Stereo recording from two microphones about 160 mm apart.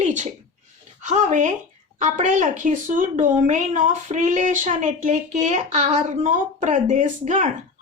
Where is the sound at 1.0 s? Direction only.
50° right (ahead or behind).